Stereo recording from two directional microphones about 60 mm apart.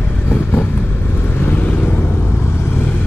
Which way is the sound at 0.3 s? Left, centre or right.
Left.